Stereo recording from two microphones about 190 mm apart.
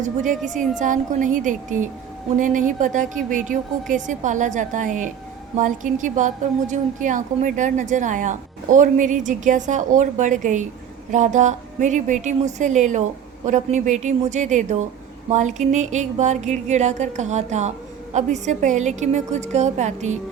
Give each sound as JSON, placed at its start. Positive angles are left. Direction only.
{"t": 0.0, "sound": "a woman's voice", "side_deg": -40}